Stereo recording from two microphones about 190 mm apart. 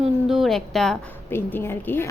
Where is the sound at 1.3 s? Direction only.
10° left (ahead or behind).